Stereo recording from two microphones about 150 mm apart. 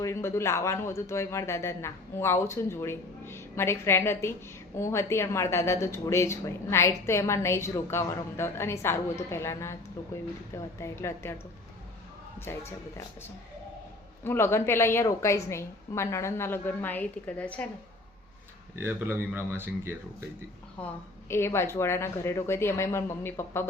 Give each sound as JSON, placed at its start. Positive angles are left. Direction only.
{"t": 0.0, "sound": "a woman's voice", "side_deg": 20}
{"t": 12.5, "sound": "a woman's voice", "side_deg": 15}
{"t": 14.3, "sound": "a woman's voice", "side_deg": 15}
{"t": 18.8, "sound": "speech", "side_deg": -15}
{"t": 20.7, "sound": "a woman's voice", "side_deg": 15}